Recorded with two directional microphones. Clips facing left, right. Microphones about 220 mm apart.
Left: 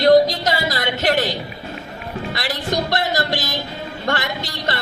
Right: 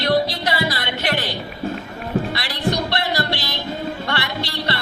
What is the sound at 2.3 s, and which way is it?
Music, 45° left (ahead or behind).